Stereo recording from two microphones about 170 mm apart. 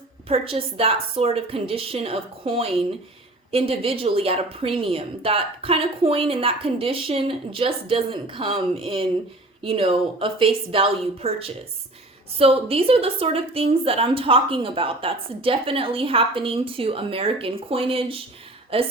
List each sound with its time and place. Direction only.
0.3 s a woman's voice: 35° right (ahead or behind)